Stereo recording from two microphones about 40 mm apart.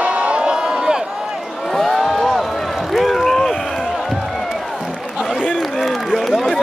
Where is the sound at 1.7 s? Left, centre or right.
Centre.